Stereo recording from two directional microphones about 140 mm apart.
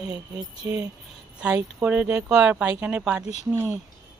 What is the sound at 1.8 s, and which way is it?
Speech, 10° right (ahead or behind).